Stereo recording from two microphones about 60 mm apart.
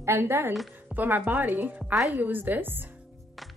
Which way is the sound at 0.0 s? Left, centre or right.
Right.